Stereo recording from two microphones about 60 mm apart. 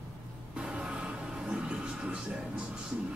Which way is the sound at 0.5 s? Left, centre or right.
Centre.